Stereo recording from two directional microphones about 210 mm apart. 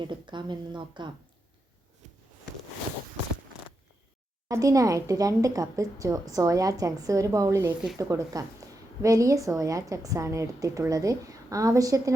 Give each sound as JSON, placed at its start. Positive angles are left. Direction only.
{"t": 0.0, "sound": "speech", "side_deg": -20}
{"t": 4.4, "sound": "a woman's voice", "side_deg": -15}